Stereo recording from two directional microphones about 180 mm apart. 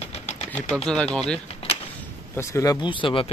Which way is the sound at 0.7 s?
5° left (ahead or behind).